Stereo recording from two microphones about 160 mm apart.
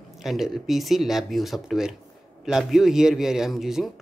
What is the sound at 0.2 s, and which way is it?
A man's voice, centre (ahead or behind).